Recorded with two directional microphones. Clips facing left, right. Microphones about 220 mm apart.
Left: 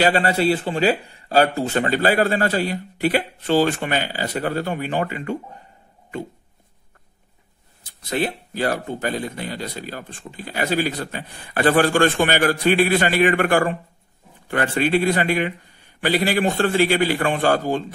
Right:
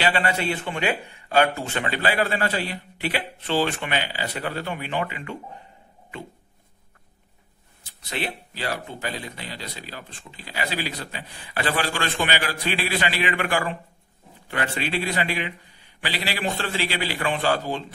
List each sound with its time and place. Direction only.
0.0 s speech: 40° left (ahead or behind)
8.1 s speech: 40° left (ahead or behind)